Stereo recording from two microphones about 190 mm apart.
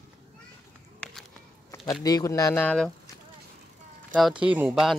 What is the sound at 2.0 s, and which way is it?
Speech, 20° left (ahead or behind).